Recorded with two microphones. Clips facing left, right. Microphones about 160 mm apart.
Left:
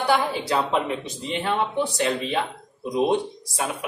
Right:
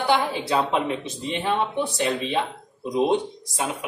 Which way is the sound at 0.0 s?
Centre (ahead or behind).